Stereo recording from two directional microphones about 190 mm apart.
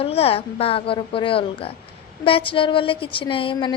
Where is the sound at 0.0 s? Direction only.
30° left (ahead or behind).